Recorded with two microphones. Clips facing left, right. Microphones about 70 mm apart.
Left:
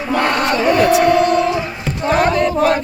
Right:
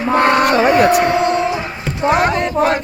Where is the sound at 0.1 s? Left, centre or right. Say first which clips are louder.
Right 4 dB; right.